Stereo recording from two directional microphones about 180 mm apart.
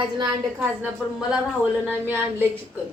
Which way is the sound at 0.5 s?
10° right (ahead or behind).